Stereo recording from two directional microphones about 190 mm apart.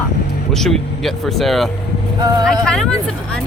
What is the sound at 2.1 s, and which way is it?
Speech, 20° right (ahead or behind).